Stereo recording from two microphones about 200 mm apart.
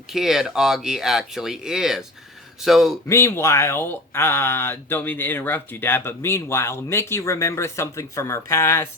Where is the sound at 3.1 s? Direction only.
15° left (ahead or behind).